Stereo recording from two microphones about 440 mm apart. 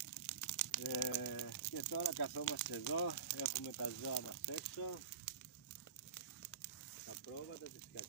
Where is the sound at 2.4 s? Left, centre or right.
Left.